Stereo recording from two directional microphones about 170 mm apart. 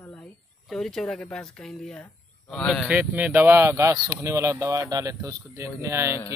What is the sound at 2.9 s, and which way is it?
Speech, 10° right (ahead or behind).